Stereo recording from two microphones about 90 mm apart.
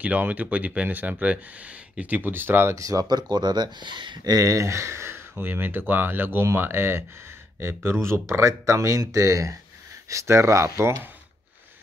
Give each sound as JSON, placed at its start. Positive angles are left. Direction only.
{"t": 0.0, "sound": "speech", "side_deg": -15}
{"t": 2.8, "sound": "speech", "side_deg": -45}
{"t": 4.2, "sound": "speech", "side_deg": -40}